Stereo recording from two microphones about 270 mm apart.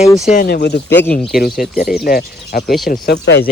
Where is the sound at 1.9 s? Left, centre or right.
Left.